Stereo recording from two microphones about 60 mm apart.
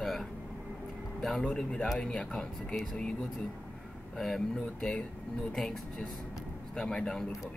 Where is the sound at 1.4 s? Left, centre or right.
Centre.